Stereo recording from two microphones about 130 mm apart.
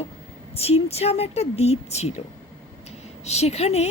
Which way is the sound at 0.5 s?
50° left (ahead or behind).